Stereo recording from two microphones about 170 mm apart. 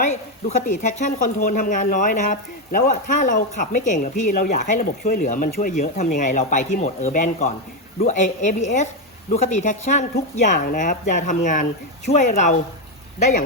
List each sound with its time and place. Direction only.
0.0 s speech: 45° left (ahead or behind)
5.8 s speech: 45° left (ahead or behind)